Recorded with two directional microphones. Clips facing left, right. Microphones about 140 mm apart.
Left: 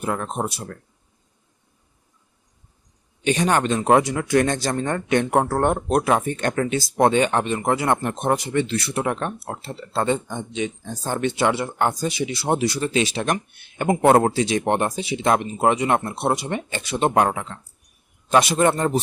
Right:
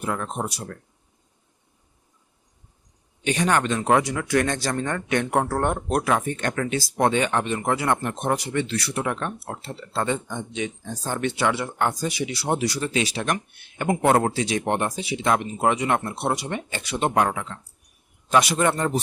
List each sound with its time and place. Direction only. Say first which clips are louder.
0.0 s speech: left 2 dB; 30° left (ahead or behind)
3.2 s speech: left 2 dB; 25° left (ahead or behind)